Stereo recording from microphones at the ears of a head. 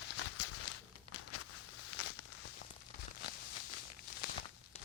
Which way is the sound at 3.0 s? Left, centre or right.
Left.